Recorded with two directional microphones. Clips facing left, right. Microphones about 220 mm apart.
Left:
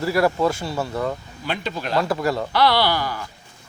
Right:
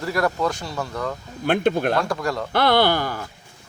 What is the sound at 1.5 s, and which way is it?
Speech, 55° right (ahead or behind).